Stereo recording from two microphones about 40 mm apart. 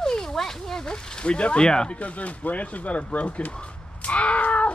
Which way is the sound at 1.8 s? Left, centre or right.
Left.